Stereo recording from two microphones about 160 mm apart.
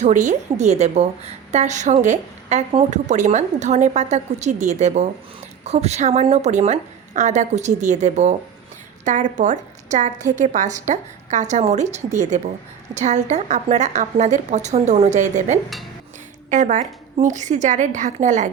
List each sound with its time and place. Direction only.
0.0 s a woman's voice: 50° right (ahead or behind)